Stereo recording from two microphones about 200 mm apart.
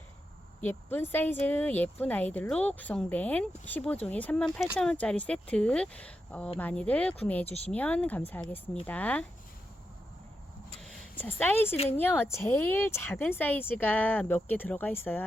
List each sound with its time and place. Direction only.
0.6 s speech: 10° left (ahead or behind)
7.4 s speech: 30° left (ahead or behind)
7.7 s speech: 5° left (ahead or behind)
10.8 s a sound: 5° left (ahead or behind)
11.9 s speech: 10° left (ahead or behind)